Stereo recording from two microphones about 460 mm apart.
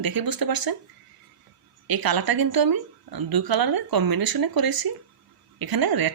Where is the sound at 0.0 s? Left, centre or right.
Right.